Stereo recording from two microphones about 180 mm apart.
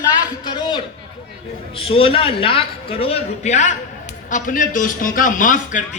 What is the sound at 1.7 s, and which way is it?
A man's voice, 30° left (ahead or behind).